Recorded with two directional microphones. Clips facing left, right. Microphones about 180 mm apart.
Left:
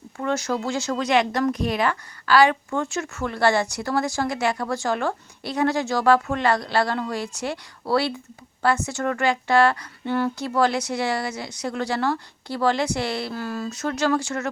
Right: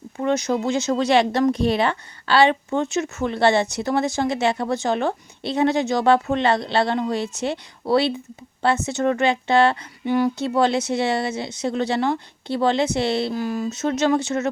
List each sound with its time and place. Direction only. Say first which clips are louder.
0.2 s speech: right 4 dB; 20° right (ahead or behind)